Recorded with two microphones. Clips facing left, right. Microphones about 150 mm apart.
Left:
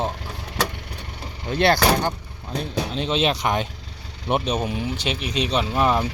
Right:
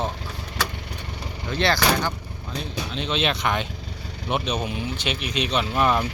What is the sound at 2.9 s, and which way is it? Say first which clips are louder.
Speech: left 2 dB; 40° left (ahead or behind).